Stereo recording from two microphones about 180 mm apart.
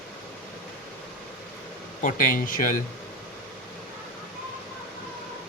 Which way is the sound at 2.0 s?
50° left (ahead or behind).